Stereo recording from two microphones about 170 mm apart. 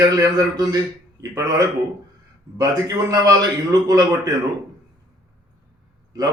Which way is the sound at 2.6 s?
20° right (ahead or behind).